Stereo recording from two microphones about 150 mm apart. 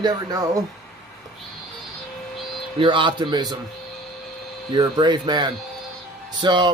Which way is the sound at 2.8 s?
35° right (ahead or behind).